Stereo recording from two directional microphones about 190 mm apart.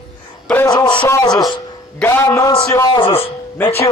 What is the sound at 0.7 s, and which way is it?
Music, 25° left (ahead or behind).